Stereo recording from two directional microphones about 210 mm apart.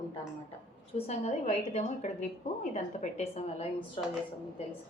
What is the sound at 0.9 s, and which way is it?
A woman's voice, 30° left (ahead or behind).